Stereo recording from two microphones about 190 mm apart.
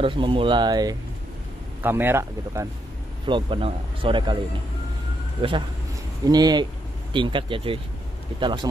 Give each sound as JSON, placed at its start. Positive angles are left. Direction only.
{"t": 0.0, "sound": "speech", "side_deg": -25}
{"t": 1.8, "sound": "speech", "side_deg": -10}
{"t": 3.3, "sound": "speech", "side_deg": -25}
{"t": 6.2, "sound": "speech", "side_deg": -20}